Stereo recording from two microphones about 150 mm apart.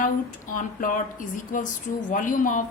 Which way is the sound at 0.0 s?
60° left (ahead or behind).